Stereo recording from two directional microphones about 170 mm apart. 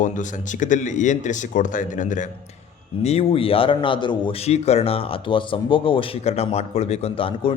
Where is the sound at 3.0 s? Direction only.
40° left (ahead or behind).